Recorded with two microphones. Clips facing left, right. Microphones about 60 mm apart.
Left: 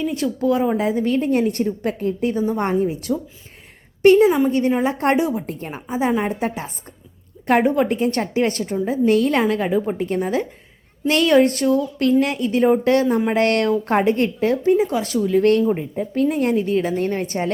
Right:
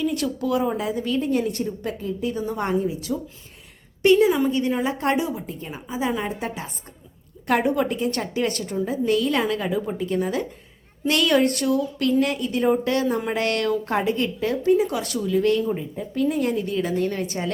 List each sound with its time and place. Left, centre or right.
0.0 s speech: left
0.9 s a woman's voice: left
2.3 s a woman's voice: left
4.3 s speech: left
4.7 s a woman's voice: left
5.5 s a woman's voice: left
14.6 s a woman's voice: left
15.8 s a woman's voice: left